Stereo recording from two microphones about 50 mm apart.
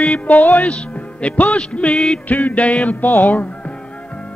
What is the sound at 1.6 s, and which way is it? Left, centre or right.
Music, left.